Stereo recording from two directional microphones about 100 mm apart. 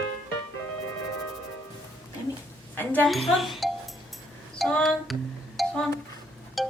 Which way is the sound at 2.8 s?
15° left (ahead or behind).